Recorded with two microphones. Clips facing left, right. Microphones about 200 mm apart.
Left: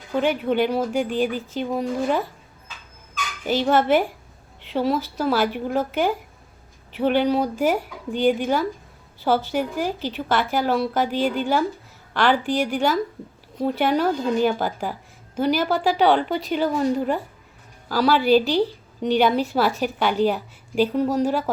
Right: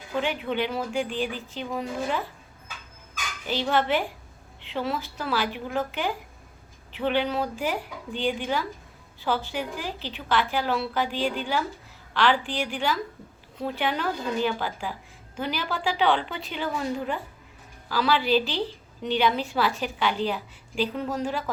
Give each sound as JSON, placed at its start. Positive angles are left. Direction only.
{"t": 0.2, "sound": "a woman's voice", "side_deg": 45}
{"t": 3.4, "sound": "a woman's voice", "side_deg": 45}